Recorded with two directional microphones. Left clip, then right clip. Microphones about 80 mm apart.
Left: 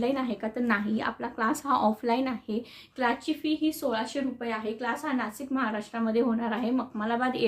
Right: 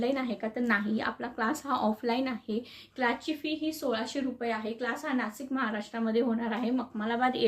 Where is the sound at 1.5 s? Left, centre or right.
Left.